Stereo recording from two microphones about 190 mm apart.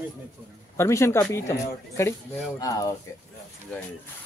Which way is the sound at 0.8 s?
15° left (ahead or behind).